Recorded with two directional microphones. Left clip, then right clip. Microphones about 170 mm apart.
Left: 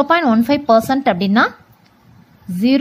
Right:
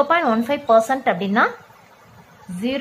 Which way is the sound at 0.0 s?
40° left (ahead or behind).